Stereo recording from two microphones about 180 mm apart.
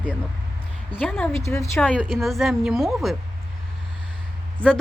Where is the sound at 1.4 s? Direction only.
15° left (ahead or behind); by 3.1 s centre (ahead or behind).